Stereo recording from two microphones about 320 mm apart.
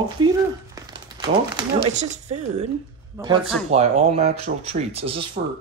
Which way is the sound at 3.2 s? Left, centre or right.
Centre.